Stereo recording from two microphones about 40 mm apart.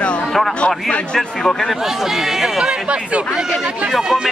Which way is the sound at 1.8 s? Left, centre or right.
Centre.